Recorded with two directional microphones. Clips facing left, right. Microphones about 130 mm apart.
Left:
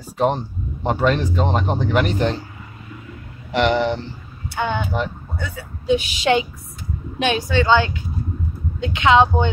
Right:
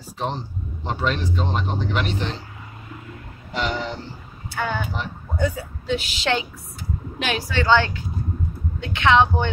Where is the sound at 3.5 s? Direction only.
75° left (ahead or behind).